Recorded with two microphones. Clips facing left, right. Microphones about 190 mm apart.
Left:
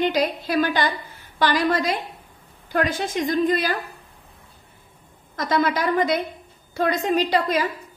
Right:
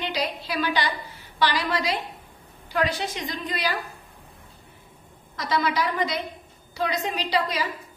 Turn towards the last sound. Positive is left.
turn(degrees=50)  # may be behind; listen again after turning